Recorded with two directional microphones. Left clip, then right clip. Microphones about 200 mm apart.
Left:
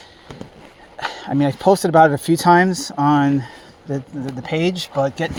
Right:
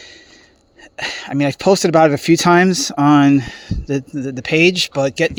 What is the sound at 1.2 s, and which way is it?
Speech, 55° right (ahead or behind).